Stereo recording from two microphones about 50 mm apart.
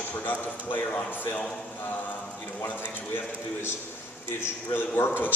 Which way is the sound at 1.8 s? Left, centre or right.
Left.